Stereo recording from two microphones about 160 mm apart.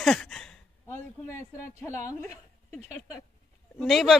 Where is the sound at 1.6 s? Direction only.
20° left (ahead or behind).